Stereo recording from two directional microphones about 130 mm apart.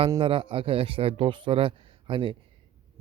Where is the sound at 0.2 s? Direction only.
45° right (ahead or behind).